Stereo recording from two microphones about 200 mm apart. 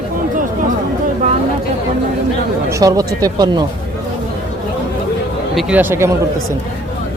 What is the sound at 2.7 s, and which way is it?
Speech, 15° right (ahead or behind).